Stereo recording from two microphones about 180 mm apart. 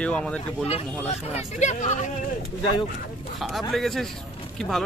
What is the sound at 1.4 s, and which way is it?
Speech, 40° left (ahead or behind).